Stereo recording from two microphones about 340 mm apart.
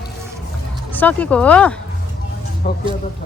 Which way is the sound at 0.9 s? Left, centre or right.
Centre.